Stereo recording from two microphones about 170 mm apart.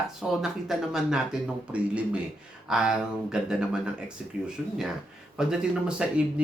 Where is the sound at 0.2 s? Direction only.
Centre (ahead or behind).